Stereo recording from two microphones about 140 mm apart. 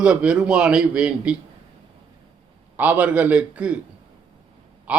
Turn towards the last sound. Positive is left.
turn(degrees=-10)  # may be behind; listen again after turning